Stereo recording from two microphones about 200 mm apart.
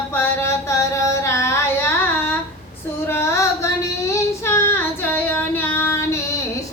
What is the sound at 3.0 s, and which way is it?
Female singing, 10° left (ahead or behind).